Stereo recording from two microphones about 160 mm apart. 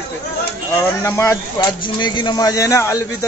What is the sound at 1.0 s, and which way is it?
Speech, 15° left (ahead or behind).